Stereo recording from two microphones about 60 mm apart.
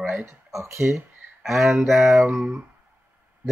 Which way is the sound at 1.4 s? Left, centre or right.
Centre.